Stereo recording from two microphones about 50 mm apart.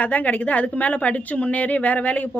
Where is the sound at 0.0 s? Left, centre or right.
Left.